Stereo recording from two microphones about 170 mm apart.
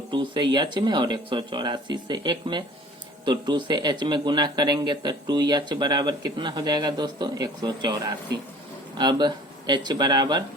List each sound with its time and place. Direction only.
0.1 s a man's voice: 25° right (ahead or behind)